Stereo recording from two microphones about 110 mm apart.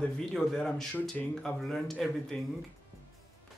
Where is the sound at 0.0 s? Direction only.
5° left (ahead or behind).